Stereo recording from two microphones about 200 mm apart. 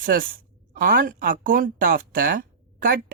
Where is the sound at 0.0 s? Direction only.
45° right (ahead or behind).